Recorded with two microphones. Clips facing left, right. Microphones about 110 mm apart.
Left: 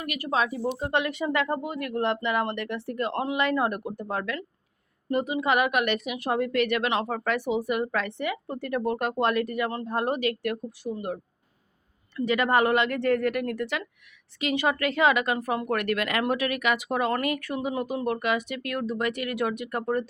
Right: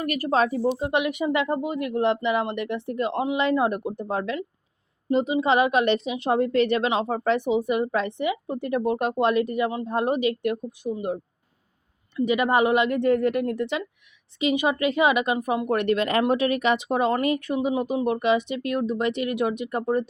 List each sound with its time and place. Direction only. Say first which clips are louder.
0.0 s speech: right 5 dB; 40° right (ahead or behind)
0.8 s a woman's voice: right 3 dB; 15° right (ahead or behind)